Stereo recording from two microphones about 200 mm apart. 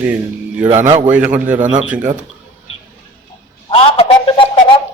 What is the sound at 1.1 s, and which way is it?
Speech, 5° right (ahead or behind).